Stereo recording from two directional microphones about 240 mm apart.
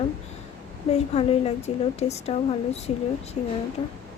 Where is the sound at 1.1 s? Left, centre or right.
Left.